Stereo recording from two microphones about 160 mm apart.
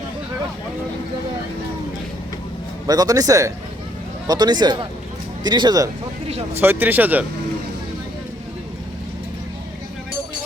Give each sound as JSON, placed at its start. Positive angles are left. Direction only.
{"t": 2.8, "sound": "a man's voice", "side_deg": -25}
{"t": 6.2, "sound": "speech", "side_deg": -40}
{"t": 6.6, "sound": "speech", "side_deg": -10}